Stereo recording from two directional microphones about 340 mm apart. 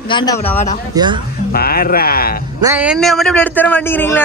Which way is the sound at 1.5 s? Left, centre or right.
Left.